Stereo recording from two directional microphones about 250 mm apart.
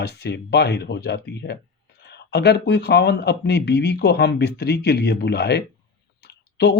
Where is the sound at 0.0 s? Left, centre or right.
Left.